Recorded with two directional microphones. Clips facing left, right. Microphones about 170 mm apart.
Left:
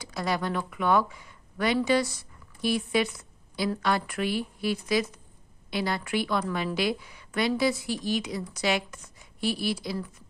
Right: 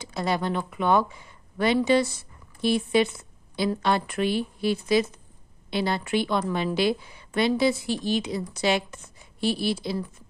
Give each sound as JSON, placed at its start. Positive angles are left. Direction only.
{"t": 0.0, "sound": "a woman's voice", "side_deg": -25}